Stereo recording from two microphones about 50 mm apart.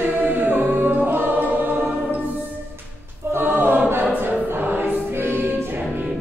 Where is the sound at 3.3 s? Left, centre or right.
Right.